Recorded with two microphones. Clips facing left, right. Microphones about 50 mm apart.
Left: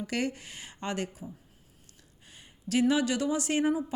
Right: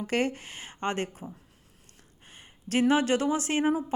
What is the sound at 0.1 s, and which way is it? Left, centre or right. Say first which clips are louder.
Speech: right 6 dB; right.